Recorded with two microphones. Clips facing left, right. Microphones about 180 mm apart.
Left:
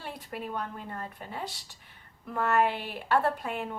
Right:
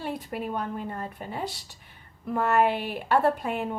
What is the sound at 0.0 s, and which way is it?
Speech, 15° right (ahead or behind).